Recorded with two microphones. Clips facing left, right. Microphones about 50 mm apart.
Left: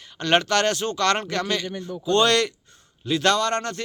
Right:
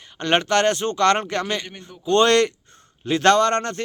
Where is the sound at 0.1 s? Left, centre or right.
Right.